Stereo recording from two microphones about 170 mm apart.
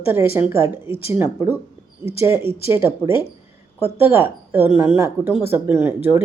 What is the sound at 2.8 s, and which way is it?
Speech, 15° right (ahead or behind).